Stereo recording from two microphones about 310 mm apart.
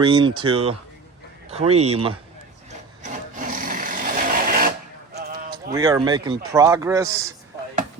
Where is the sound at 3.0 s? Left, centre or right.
Right.